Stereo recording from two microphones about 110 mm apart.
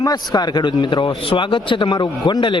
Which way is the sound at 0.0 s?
40° left (ahead or behind).